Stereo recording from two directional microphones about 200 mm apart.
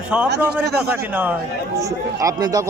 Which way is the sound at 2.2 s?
15° right (ahead or behind).